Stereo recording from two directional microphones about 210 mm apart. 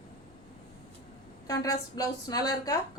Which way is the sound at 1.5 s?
15° left (ahead or behind).